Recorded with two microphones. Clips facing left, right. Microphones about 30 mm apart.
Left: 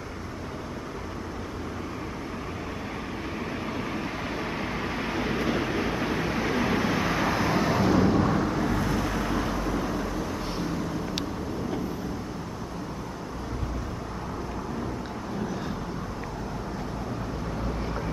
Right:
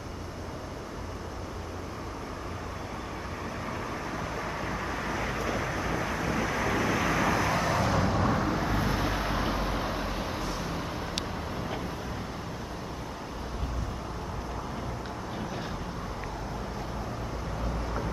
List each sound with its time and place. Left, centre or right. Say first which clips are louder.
3.6 s vehicle: left 3 dB; left; by 11.1 s right